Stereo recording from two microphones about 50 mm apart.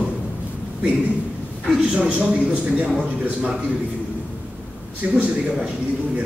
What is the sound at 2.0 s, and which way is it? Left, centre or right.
Speech, right.